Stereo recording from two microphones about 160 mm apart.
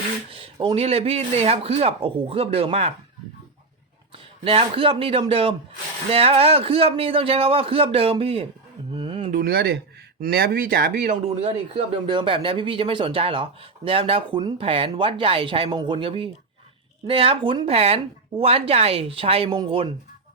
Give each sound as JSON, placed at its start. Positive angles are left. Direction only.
{"t": 0.3, "sound": "speech", "side_deg": -35}
{"t": 4.4, "sound": "speech", "side_deg": -40}
{"t": 9.0, "sound": "a sound", "side_deg": -35}
{"t": 9.3, "sound": "speech", "side_deg": -70}
{"t": 11.3, "sound": "speech", "side_deg": -40}